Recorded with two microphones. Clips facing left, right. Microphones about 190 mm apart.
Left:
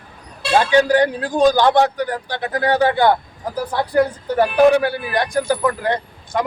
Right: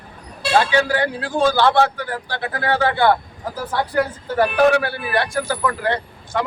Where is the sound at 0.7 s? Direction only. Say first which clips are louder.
Left 5 dB; 20° left (ahead or behind).